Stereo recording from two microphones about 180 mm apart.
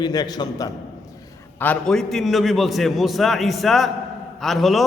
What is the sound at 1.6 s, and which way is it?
A man's voice, 5° left (ahead or behind).